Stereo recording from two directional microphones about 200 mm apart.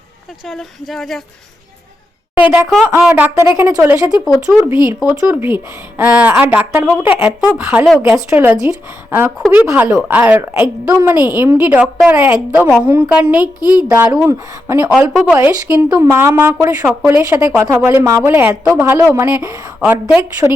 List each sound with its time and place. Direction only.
0.4 s speech: centre (ahead or behind)
2.4 s speech: 5° right (ahead or behind)
4.4 s speech: 5° right (ahead or behind)
13.4 s a woman's voice: 20° left (ahead or behind)
13.8 s speech: 15° right (ahead or behind)